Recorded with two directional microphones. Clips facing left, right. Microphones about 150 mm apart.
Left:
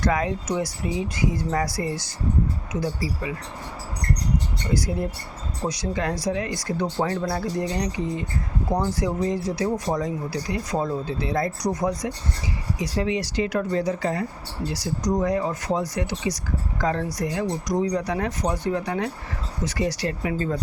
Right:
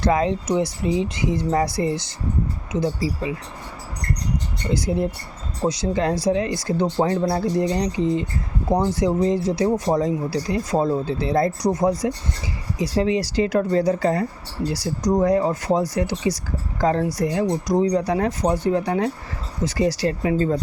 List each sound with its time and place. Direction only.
0.0 s speech: 30° right (ahead or behind)
4.7 s speech: 25° right (ahead or behind)